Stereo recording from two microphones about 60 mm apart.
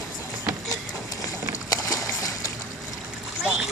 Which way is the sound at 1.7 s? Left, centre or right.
Left.